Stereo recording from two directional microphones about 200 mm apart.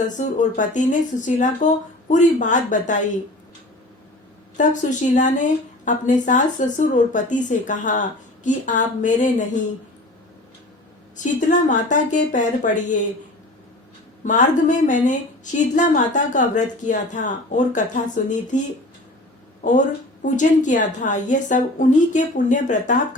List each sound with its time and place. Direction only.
0.2 s speech: 40° left (ahead or behind)
4.5 s speech: 40° left (ahead or behind)
11.2 s speech: 40° left (ahead or behind)
14.2 s speech: 40° left (ahead or behind)
20.2 s speech: 40° left (ahead or behind)